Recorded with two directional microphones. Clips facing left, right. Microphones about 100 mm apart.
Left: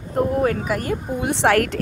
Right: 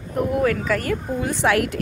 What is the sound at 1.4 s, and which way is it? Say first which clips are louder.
Speech: left 3 dB; 65° left (ahead or behind).